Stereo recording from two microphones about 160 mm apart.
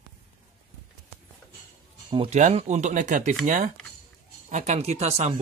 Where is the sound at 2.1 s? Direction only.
35° right (ahead or behind).